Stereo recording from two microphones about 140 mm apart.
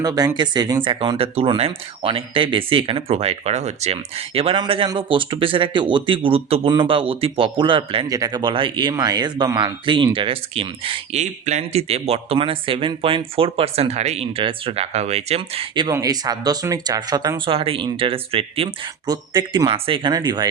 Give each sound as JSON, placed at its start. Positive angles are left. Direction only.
{"t": 0.0, "sound": "speech", "side_deg": -25}
{"t": 4.4, "sound": "speech", "side_deg": -40}
{"t": 8.1, "sound": "speech", "side_deg": -25}
{"t": 15.9, "sound": "speech", "side_deg": -25}
{"t": 19.0, "sound": "speech", "side_deg": -30}